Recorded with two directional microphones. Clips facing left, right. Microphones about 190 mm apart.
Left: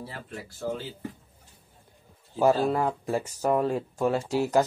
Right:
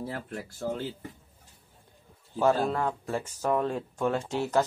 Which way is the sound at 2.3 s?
10° left (ahead or behind).